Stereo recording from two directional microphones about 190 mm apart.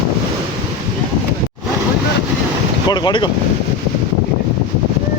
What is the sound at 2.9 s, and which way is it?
Boat, 20° left (ahead or behind).